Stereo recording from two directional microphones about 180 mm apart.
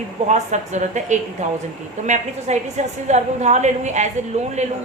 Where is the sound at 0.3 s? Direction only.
40° right (ahead or behind).